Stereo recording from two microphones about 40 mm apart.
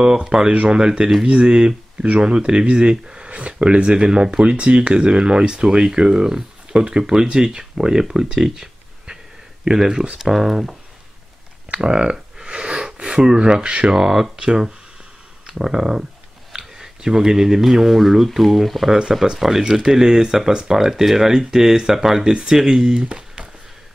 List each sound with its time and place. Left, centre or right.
0.3 s speech: centre
11.8 s speech: right
22.3 s speech: right
23.0 s a sound: right